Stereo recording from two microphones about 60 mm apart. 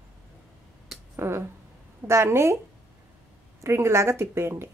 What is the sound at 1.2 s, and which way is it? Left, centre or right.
Speech, right.